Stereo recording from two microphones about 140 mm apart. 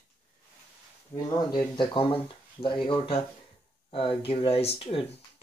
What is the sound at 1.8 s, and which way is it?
Speech, 35° left (ahead or behind).